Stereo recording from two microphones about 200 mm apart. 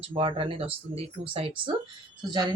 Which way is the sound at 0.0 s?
25° right (ahead or behind).